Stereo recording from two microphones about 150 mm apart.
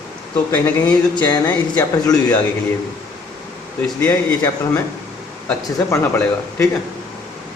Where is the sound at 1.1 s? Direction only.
30° left (ahead or behind).